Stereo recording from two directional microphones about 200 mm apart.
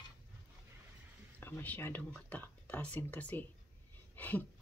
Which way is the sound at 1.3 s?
10° left (ahead or behind).